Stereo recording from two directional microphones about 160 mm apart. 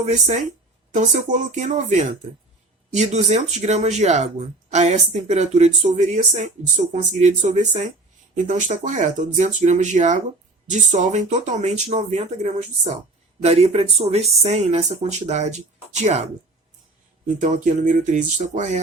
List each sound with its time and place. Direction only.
0.0 s speech: 45° right (ahead or behind)
17.4 s speech: 50° right (ahead or behind)